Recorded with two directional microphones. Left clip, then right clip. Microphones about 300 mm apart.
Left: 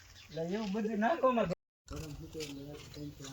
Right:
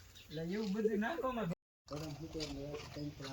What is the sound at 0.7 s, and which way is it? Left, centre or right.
Speech, left.